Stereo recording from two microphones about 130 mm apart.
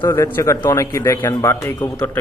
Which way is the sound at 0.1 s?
20° left (ahead or behind).